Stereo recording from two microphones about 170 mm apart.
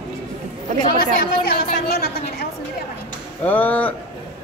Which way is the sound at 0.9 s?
55° left (ahead or behind).